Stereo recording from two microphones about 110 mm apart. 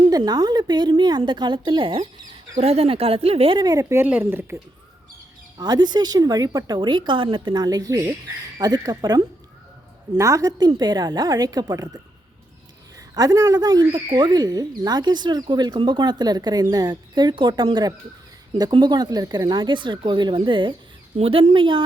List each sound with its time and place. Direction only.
0.2 s speech: 40° right (ahead or behind)
2.6 s speech: 65° right (ahead or behind)
3.6 s speech: 35° right (ahead or behind)
5.5 s speech: 40° right (ahead or behind)
13.0 s speech: 35° right (ahead or behind)